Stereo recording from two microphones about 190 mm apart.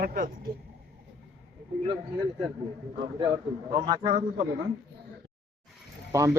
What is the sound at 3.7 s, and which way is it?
Speech, 25° right (ahead or behind).